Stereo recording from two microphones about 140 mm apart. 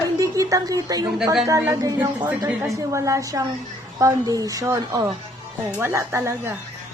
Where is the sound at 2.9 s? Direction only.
20° right (ahead or behind).